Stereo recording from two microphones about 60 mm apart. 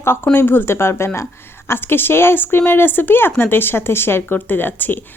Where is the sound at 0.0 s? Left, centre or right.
Left.